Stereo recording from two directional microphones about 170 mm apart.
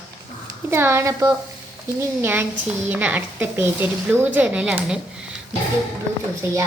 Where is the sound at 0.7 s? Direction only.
15° right (ahead or behind).